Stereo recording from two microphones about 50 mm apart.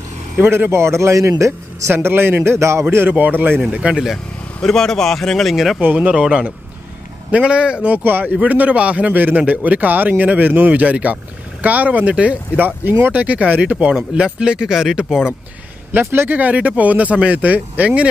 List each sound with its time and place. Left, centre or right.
0.4 s a man's voice: right
1.9 s a man's voice: right
3.1 s speech: right
3.7 s speech: centre
4.6 s speech: centre
5.9 s speech: right
7.2 s speech: right
8.0 s speech: right
9.1 s speech: right
12.5 s speech: right; by 15.1 s centre
16.0 s speech: right